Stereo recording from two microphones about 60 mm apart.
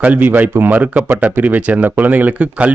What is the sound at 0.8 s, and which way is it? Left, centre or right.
Speech, right.